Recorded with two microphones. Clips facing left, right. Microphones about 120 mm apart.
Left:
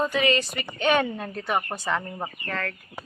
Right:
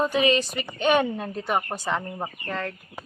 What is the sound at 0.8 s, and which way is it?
Speech, 10° right (ahead or behind).